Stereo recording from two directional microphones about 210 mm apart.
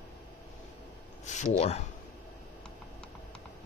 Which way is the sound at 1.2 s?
35° left (ahead or behind).